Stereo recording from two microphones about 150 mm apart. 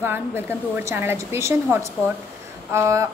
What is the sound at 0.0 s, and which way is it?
A woman's voice, 15° right (ahead or behind).